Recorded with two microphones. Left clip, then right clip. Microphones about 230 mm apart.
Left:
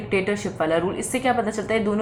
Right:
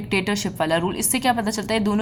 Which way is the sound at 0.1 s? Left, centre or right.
Right.